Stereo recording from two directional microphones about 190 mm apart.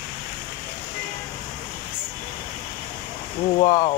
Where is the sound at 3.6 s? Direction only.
25° left (ahead or behind).